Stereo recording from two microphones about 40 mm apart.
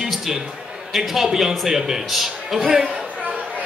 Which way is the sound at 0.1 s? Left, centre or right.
Centre.